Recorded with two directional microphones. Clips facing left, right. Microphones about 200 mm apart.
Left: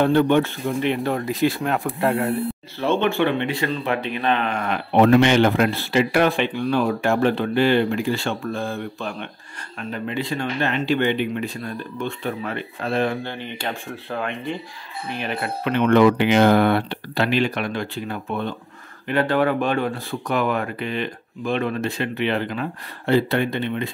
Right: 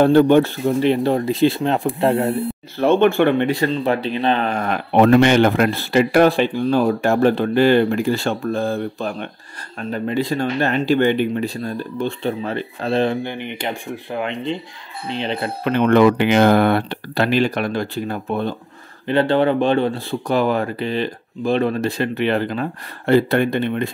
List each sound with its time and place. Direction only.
0.0 s speech: 40° right (ahead or behind)
2.8 s speech: 50° right (ahead or behind)
4.9 s speech: 50° right (ahead or behind); by 13.2 s 25° right (ahead or behind)
13.2 s speech: 15° right (ahead or behind)
15.6 s speech: 40° right (ahead or behind)